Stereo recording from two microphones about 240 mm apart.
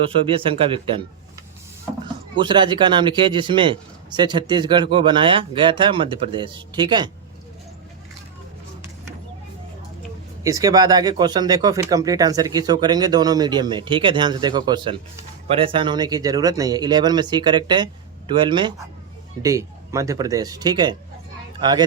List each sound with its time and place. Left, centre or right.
0.3 s a man's voice: right
2.3 s a man's voice: centre
10.4 s a man's voice: centre